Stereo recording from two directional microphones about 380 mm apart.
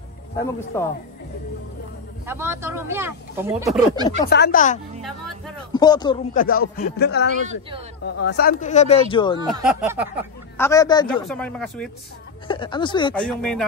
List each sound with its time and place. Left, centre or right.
0.4 s speech: centre
2.2 s speech: centre
4.3 s speech: left
5.7 s speech: centre
6.6 s speech: left
9.5 s speech: centre
10.6 s speech: centre
12.4 s speech: centre